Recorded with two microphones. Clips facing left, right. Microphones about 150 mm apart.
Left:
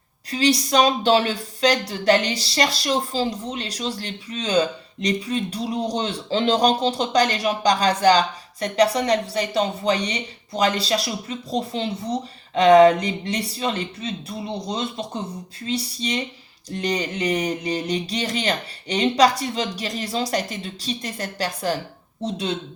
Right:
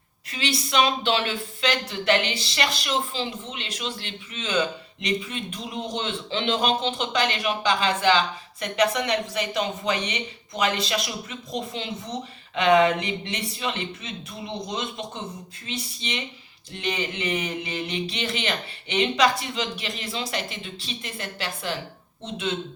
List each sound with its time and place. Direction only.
0.3 s speech: 40° left (ahead or behind)